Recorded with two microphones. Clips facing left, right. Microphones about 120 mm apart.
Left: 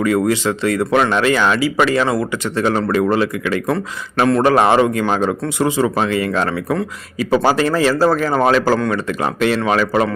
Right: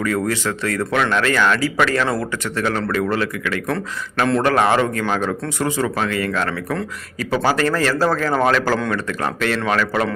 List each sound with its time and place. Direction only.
0.0 s a man's voice: 20° left (ahead or behind)
2.4 s a man's voice: 20° left (ahead or behind)